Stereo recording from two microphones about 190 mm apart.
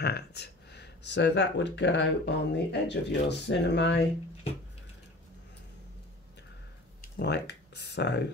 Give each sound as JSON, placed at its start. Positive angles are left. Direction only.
{"t": 0.0, "sound": "speech", "side_deg": 60}
{"t": 7.2, "sound": "speech", "side_deg": 65}